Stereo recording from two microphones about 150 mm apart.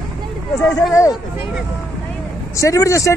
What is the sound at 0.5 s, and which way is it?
Speech, centre (ahead or behind).